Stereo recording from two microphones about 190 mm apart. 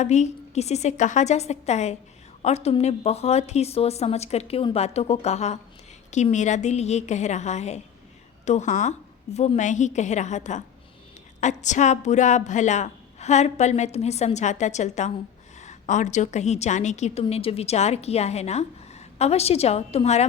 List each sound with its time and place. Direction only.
0.0 s a woman's voice: 35° left (ahead or behind)